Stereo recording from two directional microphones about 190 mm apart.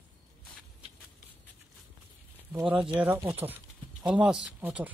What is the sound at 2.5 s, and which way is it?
Speech, 10° right (ahead or behind).